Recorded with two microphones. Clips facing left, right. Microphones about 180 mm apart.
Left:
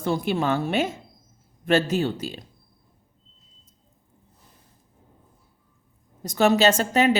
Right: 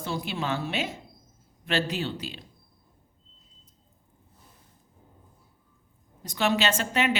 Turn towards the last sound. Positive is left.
turn(degrees=40)  # may be behind; listen again after turning